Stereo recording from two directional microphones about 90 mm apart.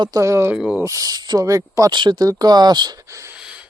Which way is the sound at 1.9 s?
55° right (ahead or behind).